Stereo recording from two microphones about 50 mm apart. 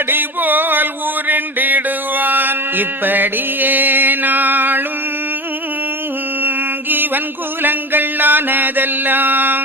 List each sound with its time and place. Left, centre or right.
0.1 s music: right
1.3 s mantra: right
6.9 s music: right
7.6 s a sound: right